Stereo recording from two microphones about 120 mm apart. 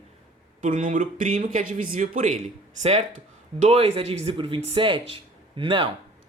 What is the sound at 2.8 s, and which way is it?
Speech, 65° right (ahead or behind).